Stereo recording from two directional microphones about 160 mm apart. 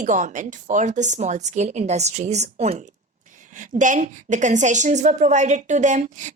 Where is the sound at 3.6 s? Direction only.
55° right (ahead or behind).